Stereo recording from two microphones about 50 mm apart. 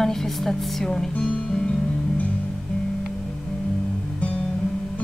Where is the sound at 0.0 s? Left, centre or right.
Centre.